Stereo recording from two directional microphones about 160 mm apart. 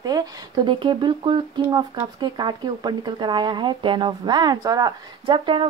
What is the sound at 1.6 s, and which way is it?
Speech, 15° right (ahead or behind).